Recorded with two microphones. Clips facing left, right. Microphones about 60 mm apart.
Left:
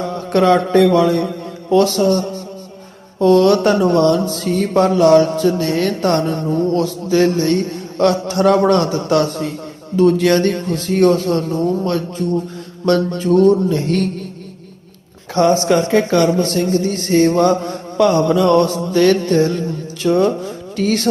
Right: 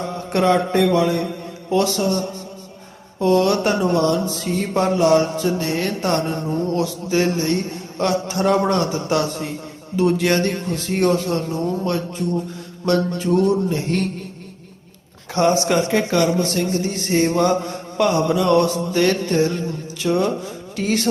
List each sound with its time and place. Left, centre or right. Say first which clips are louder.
0.3 s speech: left 5 dB; left
0.9 s a sound: left 4 dB; left
1.7 s speech: left 6 dB; left
3.2 s a sound: left 5 dB; left
9.9 s speech: left 5 dB; left
15.4 s speech: left 4 dB; left